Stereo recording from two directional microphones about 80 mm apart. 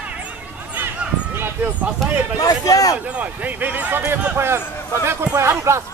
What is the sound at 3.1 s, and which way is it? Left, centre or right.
Speech, centre.